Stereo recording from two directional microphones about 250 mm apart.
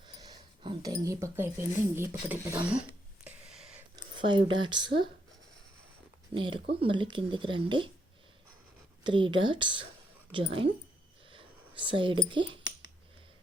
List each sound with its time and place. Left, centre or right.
0.1 s speech: centre
3.2 s a sound: centre
3.9 s speech: centre
6.3 s speech: centre
9.0 s speech: centre
11.3 s a sound: centre